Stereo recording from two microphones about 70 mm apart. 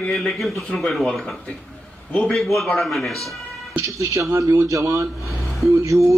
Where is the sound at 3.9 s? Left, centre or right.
Right.